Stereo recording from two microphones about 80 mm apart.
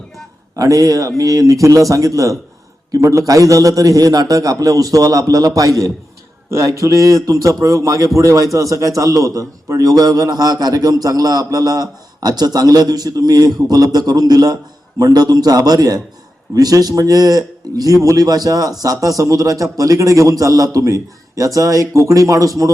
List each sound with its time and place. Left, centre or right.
0.5 s a man's voice: right